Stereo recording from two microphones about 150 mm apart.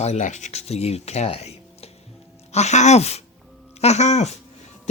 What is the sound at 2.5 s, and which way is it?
Speech, 50° left (ahead or behind).